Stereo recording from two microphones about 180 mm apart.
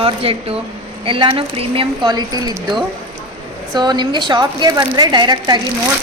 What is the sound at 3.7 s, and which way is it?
A woman's voice, 25° right (ahead or behind).